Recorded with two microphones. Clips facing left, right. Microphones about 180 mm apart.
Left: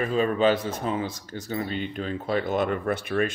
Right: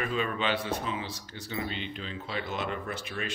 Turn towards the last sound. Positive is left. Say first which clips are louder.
# left 11 dB
turn(degrees=55)  # may be behind; listen again after turning